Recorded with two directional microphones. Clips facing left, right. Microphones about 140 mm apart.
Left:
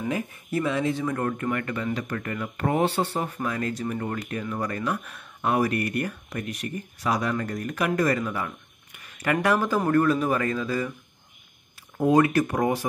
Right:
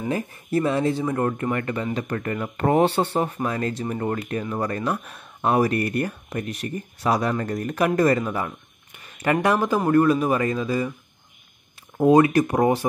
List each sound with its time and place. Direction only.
0.1 s a man's voice: 35° right (ahead or behind); by 10.9 s 15° right (ahead or behind)
12.0 s speech: 20° right (ahead or behind)